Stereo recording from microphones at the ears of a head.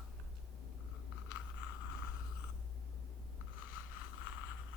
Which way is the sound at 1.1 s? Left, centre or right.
Left.